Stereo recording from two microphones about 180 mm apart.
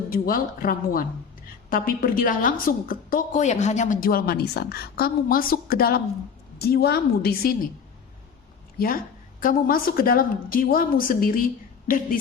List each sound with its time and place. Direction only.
0.1 s a woman's voice: 50° left (ahead or behind)
9.4 s a woman's voice: 50° left (ahead or behind)